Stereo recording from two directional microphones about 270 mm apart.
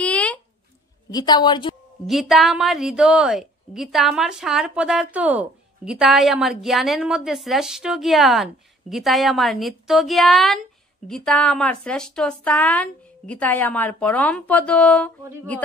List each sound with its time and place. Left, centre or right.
0.0 s a sound: centre
1.1 s a woman's voice: centre
2.0 s a woman's voice: centre